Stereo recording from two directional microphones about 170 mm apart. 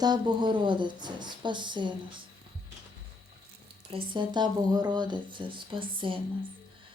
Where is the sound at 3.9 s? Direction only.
30° right (ahead or behind).